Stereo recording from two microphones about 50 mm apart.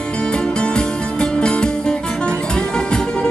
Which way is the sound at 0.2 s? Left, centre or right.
Centre.